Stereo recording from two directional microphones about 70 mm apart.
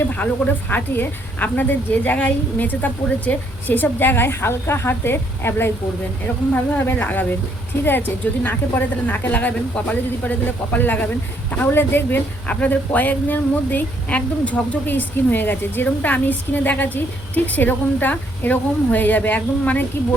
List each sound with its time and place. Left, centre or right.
0.2 s a woman's voice: centre
12.5 s a woman's voice: left